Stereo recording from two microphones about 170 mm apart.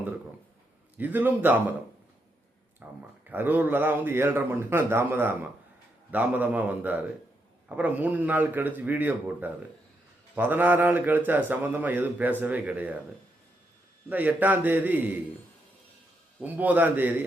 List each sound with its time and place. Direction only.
0.9 s a man's voice: 10° right (ahead or behind)
2.8 s a man's voice: 10° right (ahead or behind)
14.1 s a man's voice: 10° right (ahead or behind)
16.4 s a man's voice: 10° right (ahead or behind)